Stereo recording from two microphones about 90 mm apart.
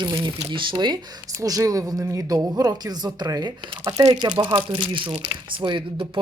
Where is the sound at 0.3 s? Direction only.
65° right (ahead or behind).